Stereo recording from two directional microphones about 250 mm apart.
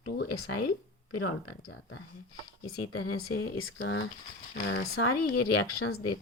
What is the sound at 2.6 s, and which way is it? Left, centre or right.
Speech, left.